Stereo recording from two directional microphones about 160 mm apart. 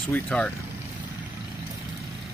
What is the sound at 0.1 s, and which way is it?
Speech, 5° left (ahead or behind).